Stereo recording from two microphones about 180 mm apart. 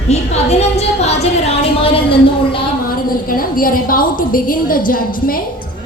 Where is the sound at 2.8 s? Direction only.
55° left (ahead or behind).